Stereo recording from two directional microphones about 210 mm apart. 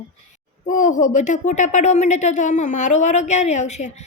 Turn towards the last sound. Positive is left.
turn(degrees=35)  # may be behind; listen again after turning